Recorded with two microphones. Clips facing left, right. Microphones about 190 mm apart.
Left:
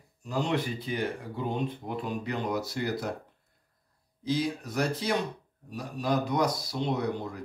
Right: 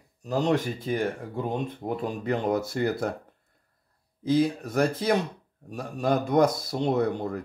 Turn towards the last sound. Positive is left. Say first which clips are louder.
# right 5 dB
turn(degrees=-50)  # may be behind; listen again after turning